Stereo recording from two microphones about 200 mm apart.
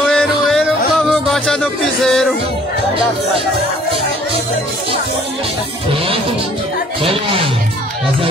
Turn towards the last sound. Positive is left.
turn(degrees=-25)  # may be behind; listen again after turning